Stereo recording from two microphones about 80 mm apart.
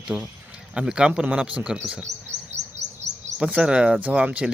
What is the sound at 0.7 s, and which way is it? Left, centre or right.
Speech, centre.